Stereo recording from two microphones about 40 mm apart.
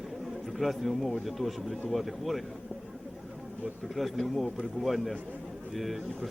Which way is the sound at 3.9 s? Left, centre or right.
Centre.